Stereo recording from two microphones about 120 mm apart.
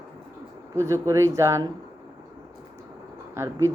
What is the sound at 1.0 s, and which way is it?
Speech, 25° right (ahead or behind).